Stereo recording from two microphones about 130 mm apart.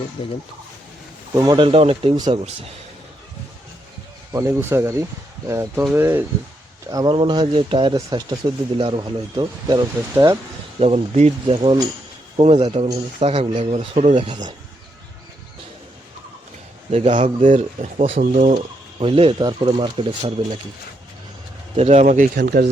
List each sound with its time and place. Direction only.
0.2 s speech: 50° left (ahead or behind)
1.4 s speech: 35° right (ahead or behind)
2.1 s speech: 35° right (ahead or behind)
4.3 s speech: 25° right (ahead or behind)
6.9 s speech: 35° right (ahead or behind)
10.8 s speech: 50° right (ahead or behind)
11.5 s speech: 35° right (ahead or behind)
12.4 s speech: 55° right (ahead or behind)
14.2 s speech: 35° right (ahead or behind)
16.9 s speech: 60° right (ahead or behind)
17.4 s speech: 70° right (ahead or behind); by 18.2 s 55° right (ahead or behind)
18.2 s speech: 70° right (ahead or behind)
18.9 s speech: 45° right (ahead or behind)
21.8 s speech: 60° right (ahead or behind); by 22.7 s 80° right